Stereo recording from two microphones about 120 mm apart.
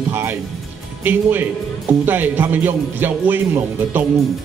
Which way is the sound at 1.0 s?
15° right (ahead or behind).